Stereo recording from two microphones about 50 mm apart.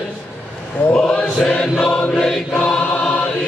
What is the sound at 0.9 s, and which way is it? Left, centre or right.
Choir, centre.